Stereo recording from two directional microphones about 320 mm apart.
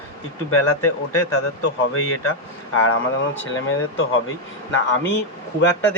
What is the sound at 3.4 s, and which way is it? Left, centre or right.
Speech, left.